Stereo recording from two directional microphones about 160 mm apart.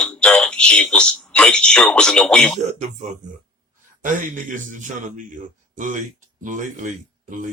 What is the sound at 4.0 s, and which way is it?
A man's voice, 55° right (ahead or behind).